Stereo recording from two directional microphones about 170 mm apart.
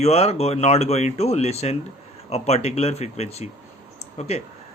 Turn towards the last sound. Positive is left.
turn(degrees=40)  # may be behind; listen again after turning